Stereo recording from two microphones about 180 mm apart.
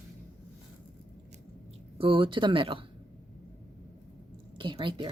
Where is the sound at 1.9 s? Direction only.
30° right (ahead or behind).